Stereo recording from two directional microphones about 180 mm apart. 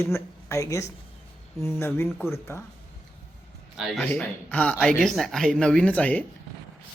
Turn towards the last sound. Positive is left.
turn(degrees=10)  # may be behind; listen again after turning